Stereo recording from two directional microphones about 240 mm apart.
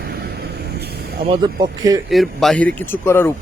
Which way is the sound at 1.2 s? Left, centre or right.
Centre.